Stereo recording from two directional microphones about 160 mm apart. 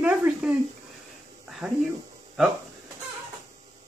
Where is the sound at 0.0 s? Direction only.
10° right (ahead or behind).